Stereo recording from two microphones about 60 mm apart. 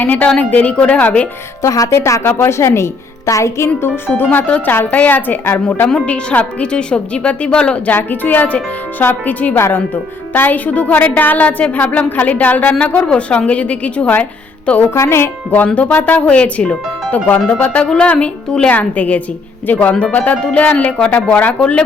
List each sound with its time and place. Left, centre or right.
0.0 s a woman's voice: left
1.6 s a woman's voice: left
2.0 s speech: left
2.2 s a woman's voice: left
3.8 s a woman's voice: left; by 7.9 s centre
7.9 s a woman's voice: left
9.6 s a woman's voice: left
9.9 s a woman's voice: left
13.1 s a woman's voice: centre
14.8 s a woman's voice: left
15.5 s a woman's voice: left